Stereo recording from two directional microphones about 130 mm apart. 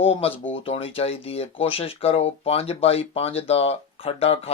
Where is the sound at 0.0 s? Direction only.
50° left (ahead or behind).